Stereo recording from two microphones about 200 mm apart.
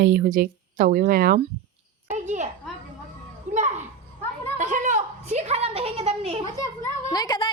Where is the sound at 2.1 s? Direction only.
35° right (ahead or behind).